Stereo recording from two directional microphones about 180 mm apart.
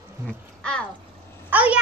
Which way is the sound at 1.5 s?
10° right (ahead or behind).